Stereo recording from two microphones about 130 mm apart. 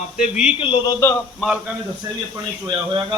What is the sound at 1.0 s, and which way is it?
Speech, 25° left (ahead or behind).